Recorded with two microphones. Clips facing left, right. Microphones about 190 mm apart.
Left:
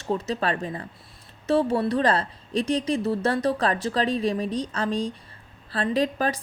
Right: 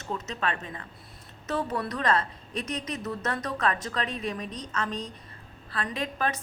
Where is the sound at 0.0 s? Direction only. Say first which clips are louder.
Left 6 dB; 35° left (ahead or behind).